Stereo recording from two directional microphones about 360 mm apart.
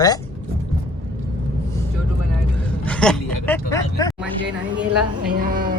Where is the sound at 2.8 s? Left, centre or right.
Centre.